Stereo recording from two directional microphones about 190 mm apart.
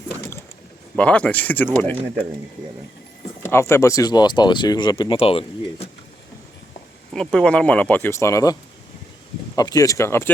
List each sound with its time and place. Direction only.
0.9 s speech: 5° left (ahead or behind)
3.4 s speech: 15° left (ahead or behind); by 5.9 s 30° left (ahead or behind)
7.1 s speech: 5° left (ahead or behind)
9.6 s speech: 20° left (ahead or behind)